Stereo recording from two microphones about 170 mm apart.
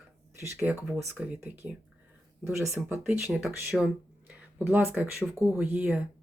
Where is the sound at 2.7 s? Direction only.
5° right (ahead or behind).